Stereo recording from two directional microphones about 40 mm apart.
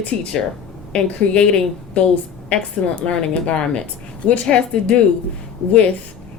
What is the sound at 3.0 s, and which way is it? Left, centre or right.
Speech, left.